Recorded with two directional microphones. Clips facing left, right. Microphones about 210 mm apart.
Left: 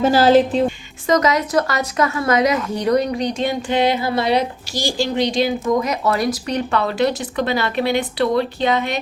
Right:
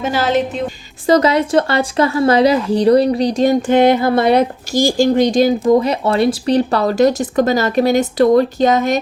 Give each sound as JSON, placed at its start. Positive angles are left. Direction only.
{"t": 0.0, "sound": "speech", "side_deg": 35}
{"t": 1.0, "sound": "a woman's voice", "side_deg": -30}